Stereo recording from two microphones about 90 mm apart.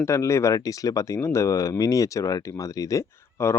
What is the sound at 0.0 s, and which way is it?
Speech, 35° left (ahead or behind).